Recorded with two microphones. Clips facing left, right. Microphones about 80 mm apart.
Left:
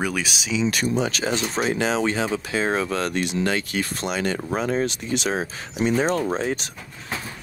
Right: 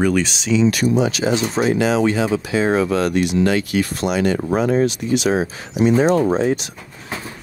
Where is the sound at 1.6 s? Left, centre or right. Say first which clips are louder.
Right 5 dB; right.